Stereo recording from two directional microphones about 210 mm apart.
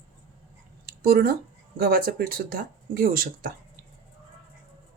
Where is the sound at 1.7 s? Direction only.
45° right (ahead or behind).